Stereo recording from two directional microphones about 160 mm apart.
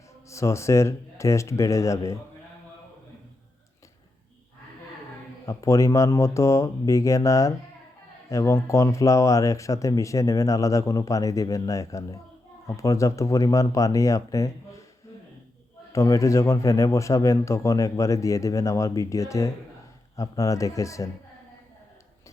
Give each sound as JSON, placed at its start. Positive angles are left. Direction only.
{"t": 0.3, "sound": "speech", "side_deg": 20}
{"t": 5.5, "sound": "speech", "side_deg": 20}
{"t": 15.9, "sound": "speech", "side_deg": 20}